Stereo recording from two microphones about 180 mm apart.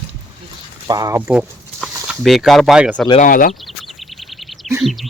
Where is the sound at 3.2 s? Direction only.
50° left (ahead or behind).